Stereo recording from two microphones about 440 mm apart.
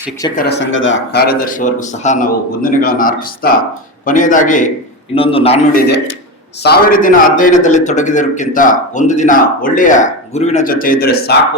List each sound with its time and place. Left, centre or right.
0.2 s a man's voice: centre
0.4 s a man's voice: left